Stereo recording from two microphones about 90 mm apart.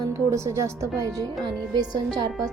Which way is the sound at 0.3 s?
35° right (ahead or behind).